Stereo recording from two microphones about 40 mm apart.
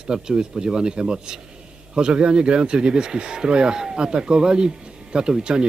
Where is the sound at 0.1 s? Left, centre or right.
Centre.